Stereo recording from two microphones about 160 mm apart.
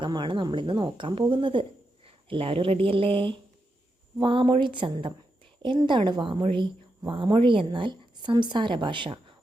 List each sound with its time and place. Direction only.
0.0 s a woman's voice: 30° right (ahead or behind)